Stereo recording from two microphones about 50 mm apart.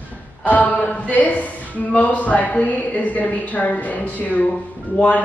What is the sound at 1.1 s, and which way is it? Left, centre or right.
A woman's voice, left.